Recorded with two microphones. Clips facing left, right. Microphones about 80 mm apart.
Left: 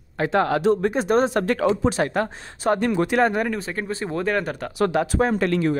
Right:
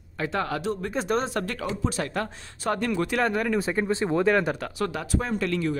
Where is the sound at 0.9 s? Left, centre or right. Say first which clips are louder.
Left 6 dB; left.